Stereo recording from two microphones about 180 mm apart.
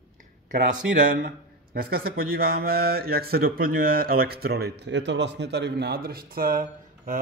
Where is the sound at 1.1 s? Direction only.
50° right (ahead or behind).